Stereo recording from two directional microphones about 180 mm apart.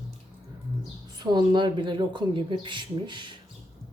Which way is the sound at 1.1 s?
25° right (ahead or behind).